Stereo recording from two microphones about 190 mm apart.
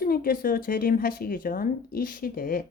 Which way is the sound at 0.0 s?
50° left (ahead or behind).